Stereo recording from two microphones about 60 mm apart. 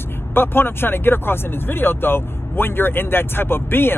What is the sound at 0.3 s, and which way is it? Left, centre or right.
Speech, left.